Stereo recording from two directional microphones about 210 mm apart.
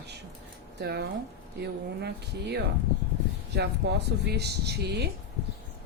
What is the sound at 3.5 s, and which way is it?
Speech, 50° right (ahead or behind).